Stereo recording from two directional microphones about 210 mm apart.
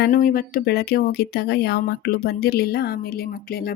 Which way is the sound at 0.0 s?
40° left (ahead or behind).